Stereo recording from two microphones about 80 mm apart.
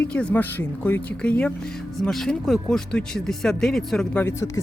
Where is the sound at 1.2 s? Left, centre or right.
Centre.